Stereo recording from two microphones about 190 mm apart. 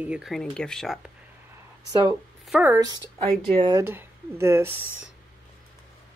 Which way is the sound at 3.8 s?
10° right (ahead or behind).